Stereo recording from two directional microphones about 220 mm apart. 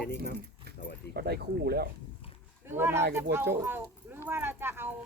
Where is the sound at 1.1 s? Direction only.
45° right (ahead or behind).